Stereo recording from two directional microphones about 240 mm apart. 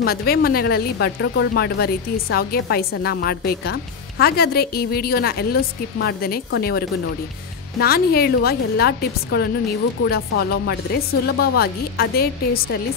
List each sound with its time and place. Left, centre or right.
0.0 s a woman's voice: left
7.8 s a woman's voice: left